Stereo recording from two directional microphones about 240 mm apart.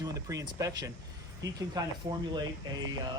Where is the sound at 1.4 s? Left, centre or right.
Right.